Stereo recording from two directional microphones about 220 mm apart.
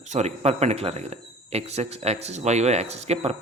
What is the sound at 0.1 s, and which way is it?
Speech, 30° right (ahead or behind).